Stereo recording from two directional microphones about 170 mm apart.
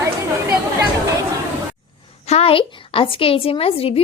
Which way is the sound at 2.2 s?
35° left (ahead or behind).